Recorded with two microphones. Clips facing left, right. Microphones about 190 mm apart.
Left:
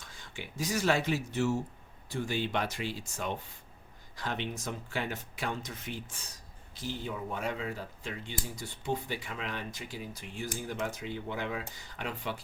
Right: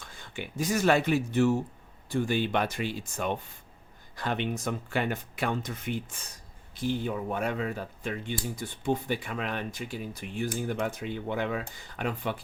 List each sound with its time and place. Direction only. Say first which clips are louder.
0.1 s speech: right 6 dB; 55° right (ahead or behind)